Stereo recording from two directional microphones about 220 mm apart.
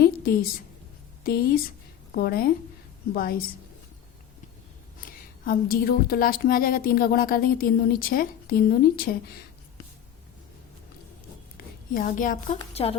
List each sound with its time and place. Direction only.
0.0 s a sound: 45° left (ahead or behind)
1.2 s speech: 45° left (ahead or behind)
4.9 s speech: 40° left (ahead or behind)
11.5 s a woman's voice: 40° left (ahead or behind)